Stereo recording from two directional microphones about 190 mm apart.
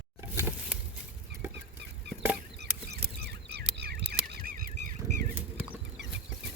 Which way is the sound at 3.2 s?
60° right (ahead or behind).